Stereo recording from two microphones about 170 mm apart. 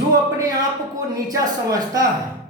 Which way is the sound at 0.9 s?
20° right (ahead or behind).